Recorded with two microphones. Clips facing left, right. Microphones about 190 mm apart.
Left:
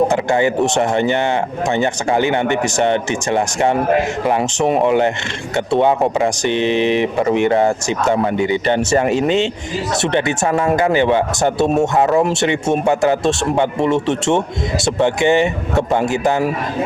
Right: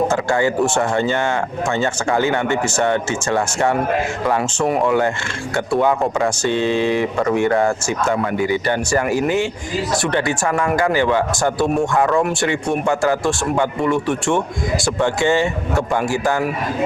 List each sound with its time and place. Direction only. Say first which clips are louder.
0.1 s speech: left 2 dB; 20° left (ahead or behind)